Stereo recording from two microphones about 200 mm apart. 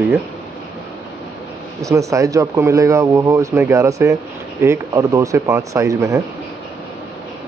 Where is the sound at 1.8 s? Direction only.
15° right (ahead or behind).